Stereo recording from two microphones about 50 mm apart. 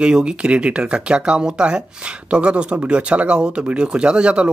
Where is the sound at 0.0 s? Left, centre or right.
Right.